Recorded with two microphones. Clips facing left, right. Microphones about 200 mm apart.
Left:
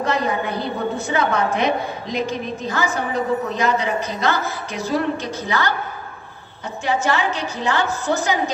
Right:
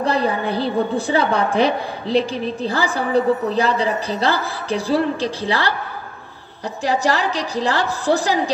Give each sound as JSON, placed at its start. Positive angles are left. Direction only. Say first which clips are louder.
{"t": 0.0, "sound": "a woman's voice", "louder": "right 2 dB", "side_deg": -30}
{"t": 6.8, "sound": "a woman's voice", "louder": "right 1 dB", "side_deg": -35}